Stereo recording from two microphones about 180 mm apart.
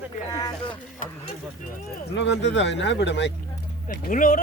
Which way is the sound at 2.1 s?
85° left.